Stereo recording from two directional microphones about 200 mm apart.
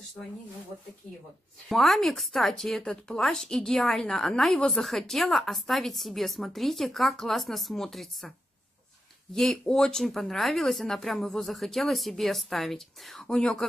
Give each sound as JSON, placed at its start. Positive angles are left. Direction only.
{"t": 1.7, "sound": "speech", "side_deg": 0}